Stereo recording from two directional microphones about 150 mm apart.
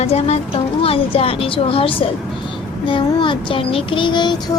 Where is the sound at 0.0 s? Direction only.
45° left (ahead or behind).